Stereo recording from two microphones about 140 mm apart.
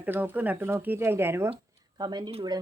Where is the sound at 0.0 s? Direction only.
15° right (ahead or behind).